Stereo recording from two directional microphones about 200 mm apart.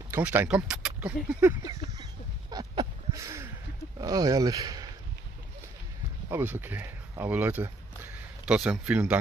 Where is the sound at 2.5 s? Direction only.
20° right (ahead or behind).